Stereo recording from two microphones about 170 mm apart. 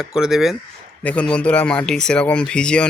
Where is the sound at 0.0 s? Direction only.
5° right (ahead or behind).